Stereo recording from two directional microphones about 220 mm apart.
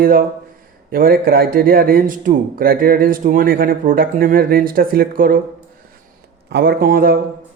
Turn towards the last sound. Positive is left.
turn(degrees=-40)  # may be behind; listen again after turning